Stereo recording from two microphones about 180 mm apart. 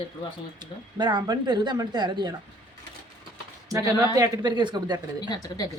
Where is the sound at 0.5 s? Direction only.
25° right (ahead or behind).